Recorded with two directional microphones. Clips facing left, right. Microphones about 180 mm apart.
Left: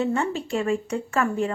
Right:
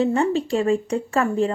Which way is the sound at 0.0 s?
35° right (ahead or behind).